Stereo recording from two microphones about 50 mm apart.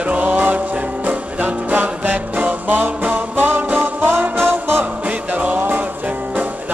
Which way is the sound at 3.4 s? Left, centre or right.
Right.